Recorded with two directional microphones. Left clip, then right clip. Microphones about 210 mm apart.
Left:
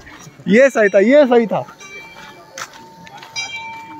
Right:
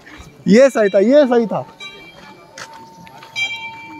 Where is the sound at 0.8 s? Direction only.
Centre (ahead or behind).